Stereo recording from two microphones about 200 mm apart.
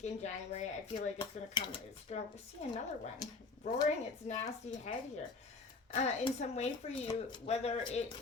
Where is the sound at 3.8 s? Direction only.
35° left (ahead or behind).